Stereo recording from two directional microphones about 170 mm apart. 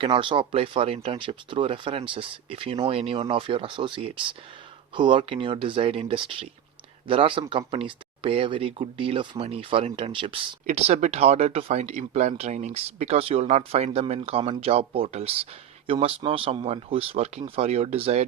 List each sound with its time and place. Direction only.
0.0 s speech: 30° right (ahead or behind)